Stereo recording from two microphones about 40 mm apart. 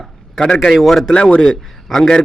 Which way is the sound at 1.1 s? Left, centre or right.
Left.